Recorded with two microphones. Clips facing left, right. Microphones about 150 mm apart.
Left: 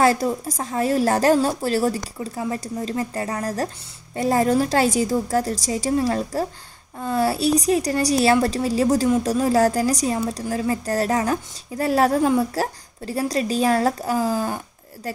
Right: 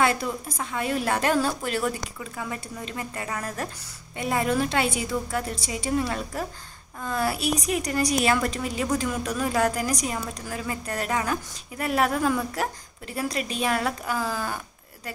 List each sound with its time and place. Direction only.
0.0 s a woman's voice: 40° left (ahead or behind)